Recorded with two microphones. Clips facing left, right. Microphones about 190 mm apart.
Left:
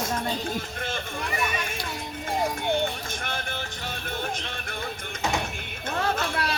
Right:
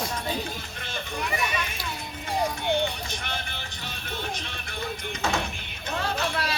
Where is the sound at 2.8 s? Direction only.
50° left (ahead or behind).